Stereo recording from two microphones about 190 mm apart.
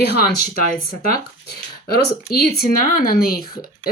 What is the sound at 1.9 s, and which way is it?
Speech, 55° left (ahead or behind).